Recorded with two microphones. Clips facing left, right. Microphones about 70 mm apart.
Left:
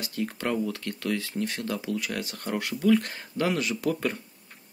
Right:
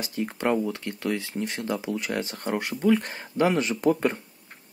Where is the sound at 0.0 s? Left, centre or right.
Right.